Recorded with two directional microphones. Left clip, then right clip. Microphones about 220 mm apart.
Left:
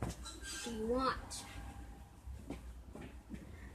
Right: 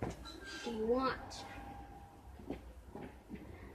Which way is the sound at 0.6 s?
30° left (ahead or behind).